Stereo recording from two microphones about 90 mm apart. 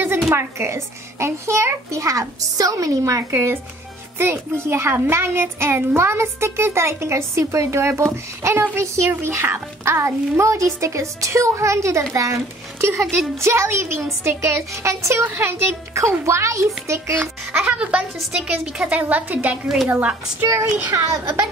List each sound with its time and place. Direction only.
0.3 s a child's voice: 30° right (ahead or behind)
13.4 s a child's voice: 30° right (ahead or behind)
17.2 s a child's voice: 20° right (ahead or behind)
20.4 s a child's voice: 30° right (ahead or behind)